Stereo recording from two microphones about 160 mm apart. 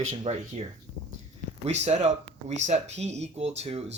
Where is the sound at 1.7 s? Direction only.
45° right (ahead or behind).